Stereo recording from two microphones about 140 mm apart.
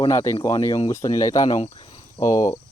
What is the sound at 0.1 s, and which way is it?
Speech, 20° left (ahead or behind).